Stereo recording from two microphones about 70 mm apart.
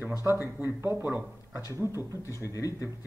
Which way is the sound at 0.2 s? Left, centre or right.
Right.